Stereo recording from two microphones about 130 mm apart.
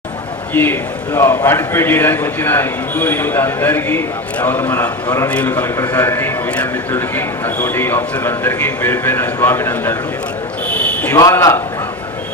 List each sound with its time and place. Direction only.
0.5 s a man's voice: 15° left (ahead or behind)
11.1 s a man's voice: 25° left (ahead or behind)